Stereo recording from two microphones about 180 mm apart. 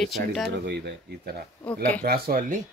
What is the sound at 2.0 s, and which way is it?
Speech, 55° right (ahead or behind).